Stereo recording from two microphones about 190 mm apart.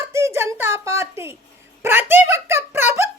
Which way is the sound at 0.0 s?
15° right (ahead or behind).